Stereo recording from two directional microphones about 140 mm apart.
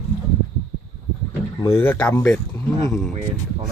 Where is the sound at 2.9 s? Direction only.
5° left (ahead or behind).